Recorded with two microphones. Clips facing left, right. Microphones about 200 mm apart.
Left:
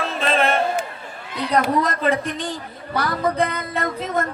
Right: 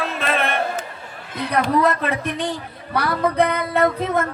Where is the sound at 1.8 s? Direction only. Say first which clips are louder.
Right 1 dB; 60° right (ahead or behind).